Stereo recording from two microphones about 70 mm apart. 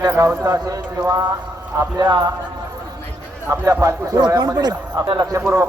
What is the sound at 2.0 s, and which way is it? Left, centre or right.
Speech, right.